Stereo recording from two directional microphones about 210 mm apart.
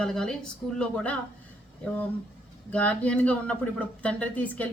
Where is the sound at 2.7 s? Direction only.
5° left (ahead or behind).